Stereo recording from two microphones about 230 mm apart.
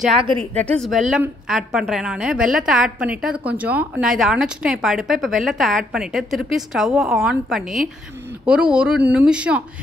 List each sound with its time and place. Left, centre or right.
0.2 s a woman's voice: right
0.6 s a woman's voice: centre